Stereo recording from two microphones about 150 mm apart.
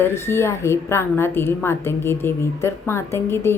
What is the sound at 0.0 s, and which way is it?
A woman's voice, 15° left (ahead or behind).